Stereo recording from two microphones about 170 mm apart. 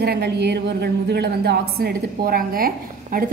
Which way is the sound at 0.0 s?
70° right (ahead or behind).